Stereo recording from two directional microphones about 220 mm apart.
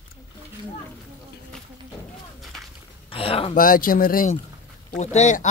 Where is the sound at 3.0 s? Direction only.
25° left (ahead or behind).